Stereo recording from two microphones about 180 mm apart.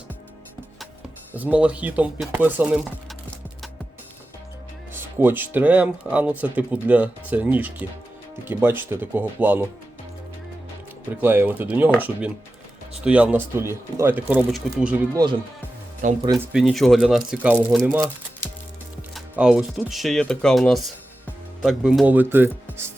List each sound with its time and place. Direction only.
1.3 s speech: 10° right (ahead or behind)
4.9 s speech: 10° right (ahead or behind)
11.2 s speech: 10° right (ahead or behind)
15.1 s speech: 25° right (ahead or behind)
16.5 s speech: 5° right (ahead or behind)
19.1 s speech: 5° right (ahead or behind)